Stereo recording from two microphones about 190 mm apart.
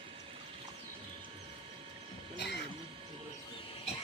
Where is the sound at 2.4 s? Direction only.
65° left (ahead or behind).